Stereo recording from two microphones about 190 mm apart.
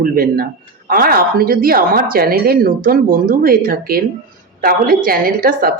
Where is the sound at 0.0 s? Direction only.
50° right (ahead or behind).